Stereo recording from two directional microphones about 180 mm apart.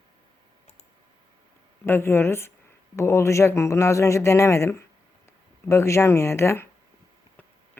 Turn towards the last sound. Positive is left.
turn(degrees=15)  # may be behind; listen again after turning